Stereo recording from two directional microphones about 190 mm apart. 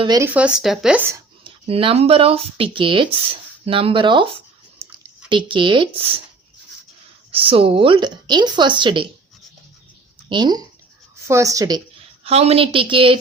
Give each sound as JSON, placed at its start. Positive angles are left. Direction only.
{"t": 0.0, "sound": "speech", "side_deg": -20}
{"t": 0.3, "sound": "speech", "side_deg": -5}
{"t": 1.5, "sound": "speech", "side_deg": -30}
{"t": 5.3, "sound": "speech", "side_deg": -25}
{"t": 7.3, "sound": "speech", "side_deg": -30}
{"t": 10.2, "sound": "a woman's voice", "side_deg": -25}
{"t": 12.2, "sound": "speech", "side_deg": -35}